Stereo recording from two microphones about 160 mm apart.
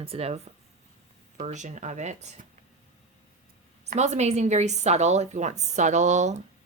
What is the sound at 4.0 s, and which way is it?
A woman's voice, 45° right (ahead or behind).